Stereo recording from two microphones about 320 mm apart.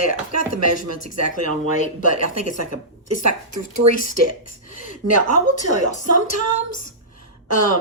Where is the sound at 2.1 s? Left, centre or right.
Right.